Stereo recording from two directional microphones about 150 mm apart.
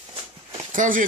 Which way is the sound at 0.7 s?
60° right (ahead or behind).